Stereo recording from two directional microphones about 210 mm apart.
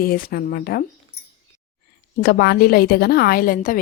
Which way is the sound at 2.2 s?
50° left (ahead or behind).